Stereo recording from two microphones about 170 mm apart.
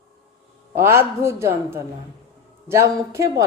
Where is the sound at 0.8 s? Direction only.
15° right (ahead or behind).